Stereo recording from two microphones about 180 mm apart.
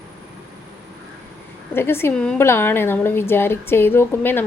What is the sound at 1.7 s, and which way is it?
A woman's voice, 15° left (ahead or behind).